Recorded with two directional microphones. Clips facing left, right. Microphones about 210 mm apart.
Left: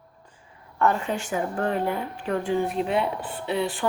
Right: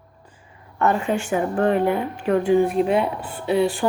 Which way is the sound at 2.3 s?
15° right (ahead or behind).